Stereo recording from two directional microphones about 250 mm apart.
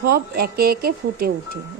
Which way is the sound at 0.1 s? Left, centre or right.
Right.